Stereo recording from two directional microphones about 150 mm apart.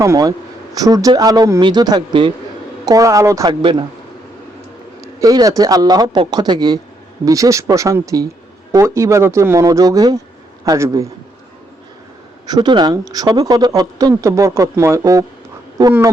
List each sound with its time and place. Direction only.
0.0 s speech: 20° right (ahead or behind)
2.8 s speech: 20° right (ahead or behind)
3.4 s speech: 35° right (ahead or behind)
5.2 s speech: 25° right (ahead or behind)
12.5 s speech: 30° right (ahead or behind)